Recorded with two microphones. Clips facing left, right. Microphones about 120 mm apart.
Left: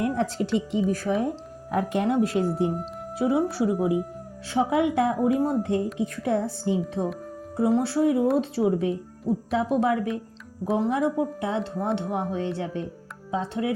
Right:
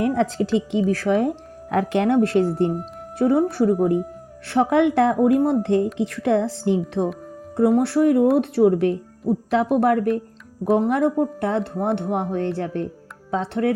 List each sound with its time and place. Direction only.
0.0 s a woman's voice: 90° right; by 3.8 s 50° right (ahead or behind)
4.4 s speech: 70° right (ahead or behind)